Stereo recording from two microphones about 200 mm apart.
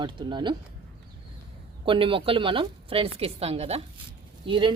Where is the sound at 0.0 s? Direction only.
25° right (ahead or behind).